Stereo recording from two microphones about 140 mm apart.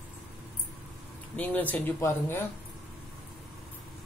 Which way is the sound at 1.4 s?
10° left (ahead or behind).